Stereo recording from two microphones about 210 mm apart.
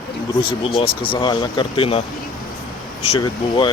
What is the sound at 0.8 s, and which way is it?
Speech, 25° left (ahead or behind).